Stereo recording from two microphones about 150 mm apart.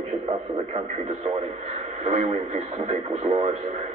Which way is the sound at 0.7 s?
45° right (ahead or behind).